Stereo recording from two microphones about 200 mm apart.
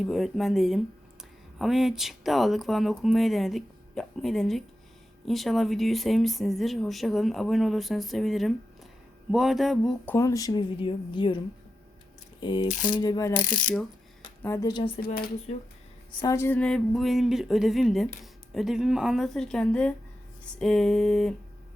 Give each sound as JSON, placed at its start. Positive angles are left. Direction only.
{"t": 0.0, "sound": "speech", "side_deg": 0}
{"t": 10.2, "sound": "speech", "side_deg": 15}
{"t": 12.4, "sound": "a sound", "side_deg": 25}
{"t": 12.6, "sound": "speech", "side_deg": 40}
{"t": 13.0, "sound": "speech", "side_deg": 20}
{"t": 13.5, "sound": "mechanisms", "side_deg": 5}
{"t": 14.4, "sound": "speech", "side_deg": 15}
{"t": 15.0, "sound": "speech", "side_deg": 50}
{"t": 15.5, "sound": "speech", "side_deg": 35}
{"t": 16.2, "sound": "speech", "side_deg": 15}